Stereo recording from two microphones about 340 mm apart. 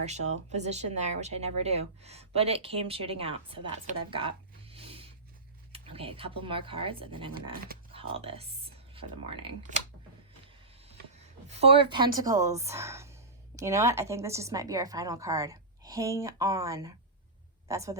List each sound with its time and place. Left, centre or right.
0.0 s speech: centre
10.9 s a woman's voice: centre